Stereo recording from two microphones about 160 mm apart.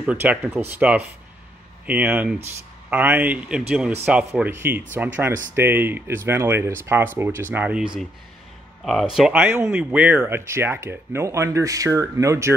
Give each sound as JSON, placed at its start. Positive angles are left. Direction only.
{"t": 0.0, "sound": "speech", "side_deg": -10}
{"t": 9.1, "sound": "speech", "side_deg": -5}